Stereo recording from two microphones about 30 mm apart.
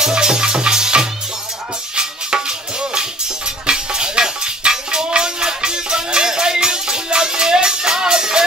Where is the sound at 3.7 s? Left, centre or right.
Right.